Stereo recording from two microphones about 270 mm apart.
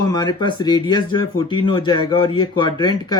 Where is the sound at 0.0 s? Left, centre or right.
Centre.